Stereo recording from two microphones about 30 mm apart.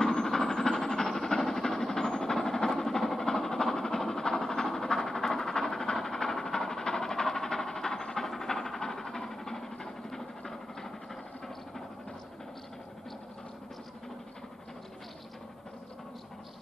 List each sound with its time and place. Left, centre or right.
0.0 s train: left
1.0 s train: centre